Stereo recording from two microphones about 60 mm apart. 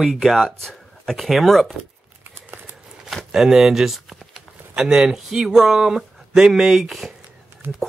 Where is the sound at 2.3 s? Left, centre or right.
Right.